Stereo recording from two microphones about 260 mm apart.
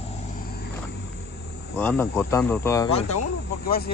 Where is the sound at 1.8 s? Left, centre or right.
Centre.